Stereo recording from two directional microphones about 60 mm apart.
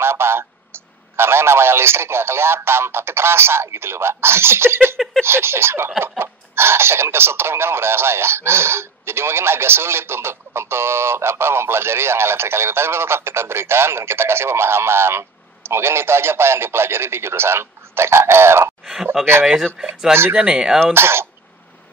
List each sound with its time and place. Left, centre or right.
0.0 s a sound: right
1.1 s speech: right
19.2 s speech: centre
20.3 s speech: centre
20.8 s speech: right